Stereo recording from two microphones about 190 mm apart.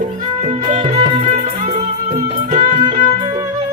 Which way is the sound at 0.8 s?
35° right (ahead or behind).